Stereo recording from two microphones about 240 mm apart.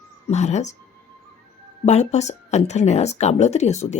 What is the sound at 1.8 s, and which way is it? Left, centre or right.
A woman's voice, left.